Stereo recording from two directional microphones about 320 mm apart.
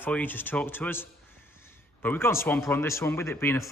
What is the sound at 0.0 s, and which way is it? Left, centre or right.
Speech, centre.